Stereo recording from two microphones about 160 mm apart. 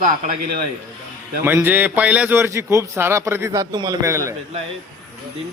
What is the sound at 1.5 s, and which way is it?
A man's voice, 15° right (ahead or behind).